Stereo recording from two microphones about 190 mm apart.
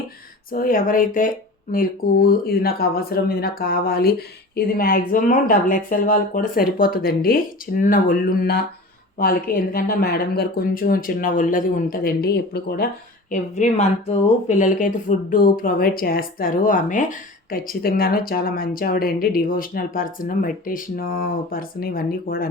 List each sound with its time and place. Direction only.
0.5 s a woman's voice: 45° left (ahead or behind)
13.3 s a woman's voice: 40° left (ahead or behind)